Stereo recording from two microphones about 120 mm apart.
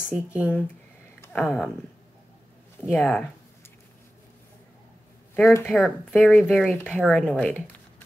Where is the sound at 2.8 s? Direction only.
20° left (ahead or behind).